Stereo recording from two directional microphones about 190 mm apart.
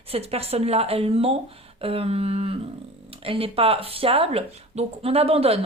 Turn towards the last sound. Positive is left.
turn(degrees=-30)  # may be behind; listen again after turning